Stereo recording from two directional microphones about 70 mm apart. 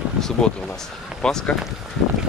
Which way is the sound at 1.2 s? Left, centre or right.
Centre.